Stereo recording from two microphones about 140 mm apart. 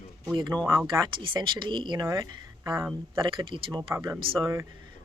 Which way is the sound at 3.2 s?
35° right (ahead or behind).